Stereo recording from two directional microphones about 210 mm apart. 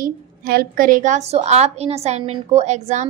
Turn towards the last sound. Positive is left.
turn(degrees=-35)  # may be behind; listen again after turning